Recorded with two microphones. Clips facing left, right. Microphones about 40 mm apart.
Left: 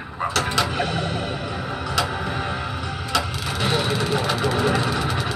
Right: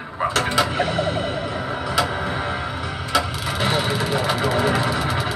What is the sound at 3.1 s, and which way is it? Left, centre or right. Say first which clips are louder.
Vehicle: right 3 dB; centre.